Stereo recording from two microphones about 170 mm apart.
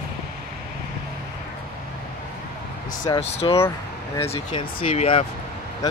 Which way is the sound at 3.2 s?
40° left (ahead or behind).